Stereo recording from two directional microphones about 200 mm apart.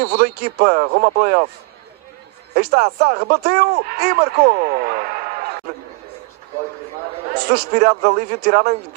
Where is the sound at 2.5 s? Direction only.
50° right (ahead or behind).